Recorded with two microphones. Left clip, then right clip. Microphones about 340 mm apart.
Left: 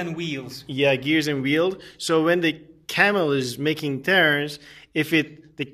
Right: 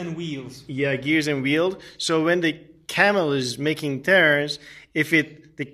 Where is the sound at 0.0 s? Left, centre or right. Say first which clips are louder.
Left 3 dB; left.